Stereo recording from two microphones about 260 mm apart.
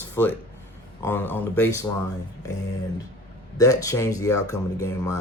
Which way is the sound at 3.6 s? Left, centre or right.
Centre.